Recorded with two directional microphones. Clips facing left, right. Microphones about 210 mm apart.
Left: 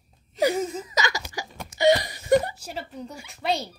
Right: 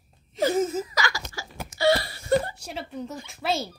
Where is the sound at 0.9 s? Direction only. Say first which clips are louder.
Left 2 dB; 20° left (ahead or behind).